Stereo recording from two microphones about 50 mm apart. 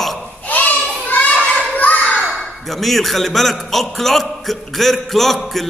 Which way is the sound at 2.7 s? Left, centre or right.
Centre.